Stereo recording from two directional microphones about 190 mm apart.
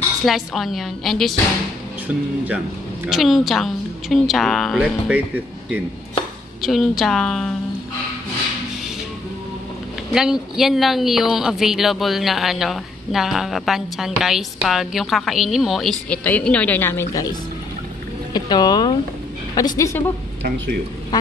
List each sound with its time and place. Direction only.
0.2 s speech: centre (ahead or behind)
10.1 s speech: centre (ahead or behind); by 17.3 s 15° left (ahead or behind)
18.3 s a woman's voice: 20° left (ahead or behind)